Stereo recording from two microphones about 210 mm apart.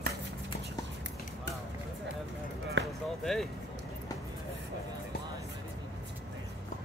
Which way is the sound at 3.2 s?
Centre (ahead or behind).